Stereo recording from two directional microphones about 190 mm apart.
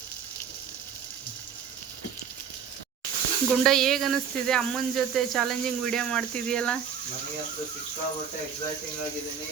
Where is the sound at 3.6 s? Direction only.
Centre (ahead or behind).